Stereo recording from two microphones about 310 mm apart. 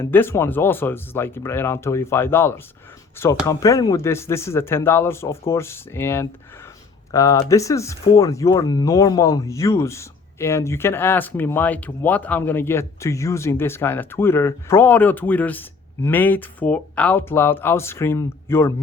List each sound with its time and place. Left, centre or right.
0.0 s speech: centre